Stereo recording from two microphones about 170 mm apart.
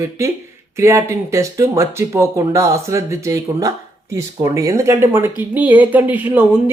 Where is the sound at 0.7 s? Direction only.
15° right (ahead or behind).